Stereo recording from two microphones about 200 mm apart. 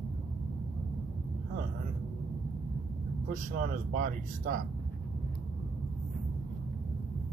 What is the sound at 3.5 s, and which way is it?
Speech, 45° right (ahead or behind).